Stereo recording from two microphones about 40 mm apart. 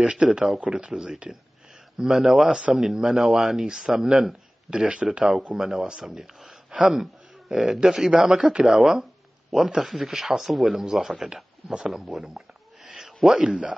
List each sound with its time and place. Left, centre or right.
0.0 s speech: right
0.6 s speech: right
2.0 s speech: centre
3.9 s speech: centre
4.6 s speech: right
5.5 s speech: centre
9.8 s speech: centre
12.2 s a sound: right
13.4 s speech: right